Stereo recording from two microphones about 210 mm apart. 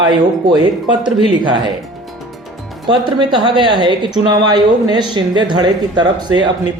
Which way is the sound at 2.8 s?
20° right (ahead or behind).